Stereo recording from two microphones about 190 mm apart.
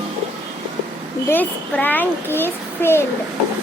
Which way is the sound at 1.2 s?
10° left (ahead or behind).